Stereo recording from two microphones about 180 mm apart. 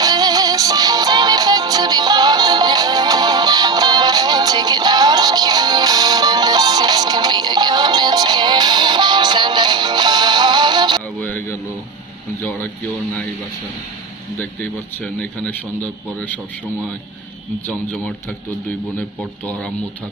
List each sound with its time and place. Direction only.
0.0 s music: 20° right (ahead or behind)
11.2 s a sound: 10° left (ahead or behind)
14.3 s a man's voice: 10° left (ahead or behind)
17.7 s a man's voice: 5° left (ahead or behind)
19.5 s a man's voice: 5° left (ahead or behind)